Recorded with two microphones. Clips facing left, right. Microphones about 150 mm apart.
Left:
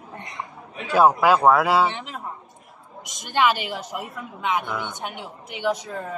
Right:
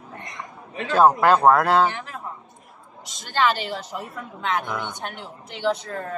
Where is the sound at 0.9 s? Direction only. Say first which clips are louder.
Even; 10° left (ahead or behind).